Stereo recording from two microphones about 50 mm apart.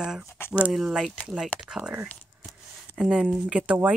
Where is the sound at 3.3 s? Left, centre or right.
Centre.